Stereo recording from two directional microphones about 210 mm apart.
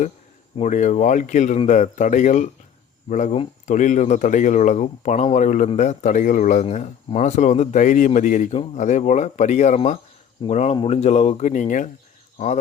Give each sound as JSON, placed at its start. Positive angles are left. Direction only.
{"t": 0.5, "sound": "speech", "side_deg": 35}